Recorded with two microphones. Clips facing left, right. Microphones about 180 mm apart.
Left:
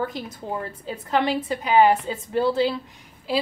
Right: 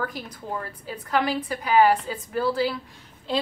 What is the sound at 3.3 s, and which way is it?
Speech, 5° left (ahead or behind).